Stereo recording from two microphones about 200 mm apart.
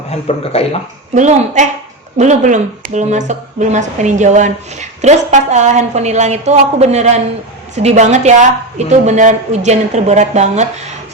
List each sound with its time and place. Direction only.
0.1 s speech: 30° left (ahead or behind)
1.1 s speech: 35° right (ahead or behind)